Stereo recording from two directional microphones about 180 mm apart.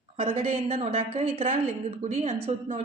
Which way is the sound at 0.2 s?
30° right (ahead or behind).